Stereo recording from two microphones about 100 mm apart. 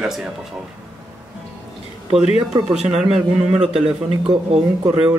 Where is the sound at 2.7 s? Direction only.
5° right (ahead or behind).